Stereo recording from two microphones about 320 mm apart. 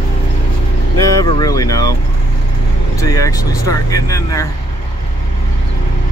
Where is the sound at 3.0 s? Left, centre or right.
Centre.